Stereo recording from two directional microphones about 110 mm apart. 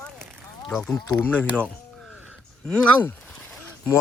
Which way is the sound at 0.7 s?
10° left (ahead or behind).